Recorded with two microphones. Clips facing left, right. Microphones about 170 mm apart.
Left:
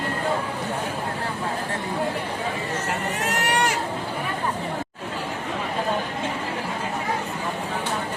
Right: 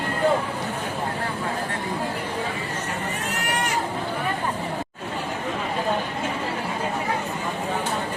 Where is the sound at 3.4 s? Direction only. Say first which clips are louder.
Left 4 dB; 75° left (ahead or behind).